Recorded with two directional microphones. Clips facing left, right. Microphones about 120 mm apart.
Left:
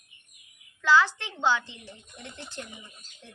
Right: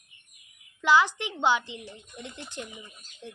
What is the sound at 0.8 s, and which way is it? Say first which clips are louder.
A woman's voice: even; 15° right (ahead or behind).